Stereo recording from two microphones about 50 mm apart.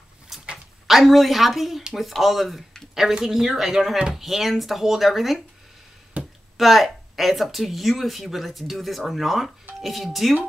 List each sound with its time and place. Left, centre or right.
0.3 s dog: centre
0.8 s speech: centre
6.2 s a sound: right
6.5 s speech: centre